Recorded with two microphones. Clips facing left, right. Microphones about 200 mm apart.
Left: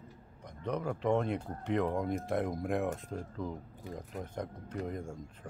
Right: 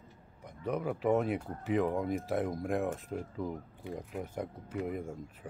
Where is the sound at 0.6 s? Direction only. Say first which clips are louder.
Right 1 dB; 5° right (ahead or behind).